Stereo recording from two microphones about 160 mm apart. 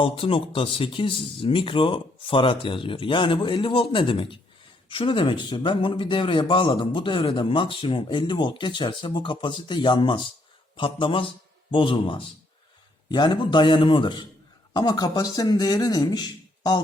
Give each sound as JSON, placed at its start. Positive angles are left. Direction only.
{"t": 0.0, "sound": "speech", "side_deg": 35}